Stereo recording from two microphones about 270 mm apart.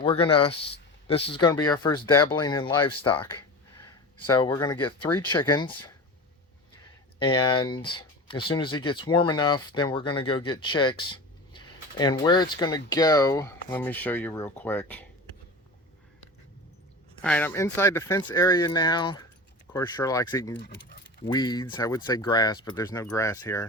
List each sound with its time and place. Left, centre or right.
0.0 s speech: centre
4.3 s speech: centre
7.2 s speech: centre
17.2 s speech: centre
20.6 s speech: left
21.2 s speech: centre